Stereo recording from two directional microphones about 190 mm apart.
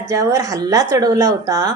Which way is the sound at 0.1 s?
15° right (ahead or behind).